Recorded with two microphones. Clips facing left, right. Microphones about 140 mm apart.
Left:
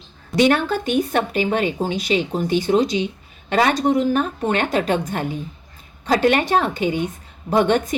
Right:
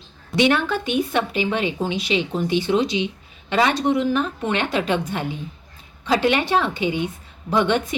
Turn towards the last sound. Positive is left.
turn(degrees=45)  # may be behind; listen again after turning